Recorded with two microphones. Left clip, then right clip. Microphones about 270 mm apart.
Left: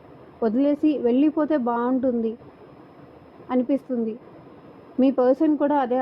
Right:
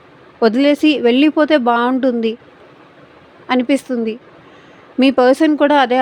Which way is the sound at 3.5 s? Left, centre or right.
Right.